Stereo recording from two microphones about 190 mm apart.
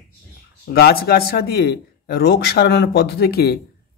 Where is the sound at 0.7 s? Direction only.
55° left (ahead or behind).